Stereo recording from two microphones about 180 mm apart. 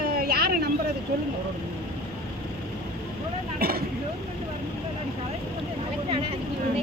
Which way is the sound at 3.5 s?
55° right (ahead or behind).